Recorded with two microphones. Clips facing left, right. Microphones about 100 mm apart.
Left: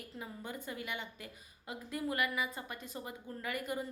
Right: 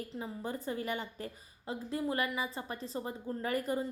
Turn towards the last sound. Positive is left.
turn(degrees=-35)  # may be behind; listen again after turning